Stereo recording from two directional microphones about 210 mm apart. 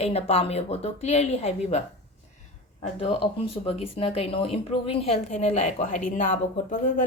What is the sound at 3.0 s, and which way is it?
Speech, 25° left (ahead or behind).